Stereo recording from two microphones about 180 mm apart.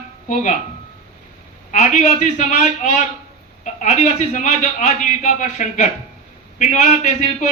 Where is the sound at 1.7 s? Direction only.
40° left (ahead or behind).